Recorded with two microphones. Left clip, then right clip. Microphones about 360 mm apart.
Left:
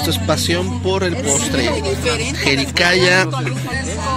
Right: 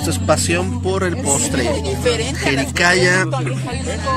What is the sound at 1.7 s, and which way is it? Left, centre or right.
Speech, right.